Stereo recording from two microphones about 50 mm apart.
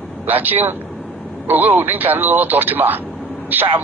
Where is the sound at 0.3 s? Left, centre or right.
Right.